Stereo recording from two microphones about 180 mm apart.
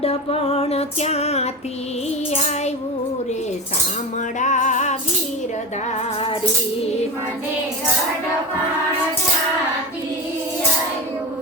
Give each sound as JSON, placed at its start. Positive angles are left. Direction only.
{"t": 0.0, "sound": "music", "side_deg": 35}
{"t": 4.4, "sound": "music", "side_deg": 45}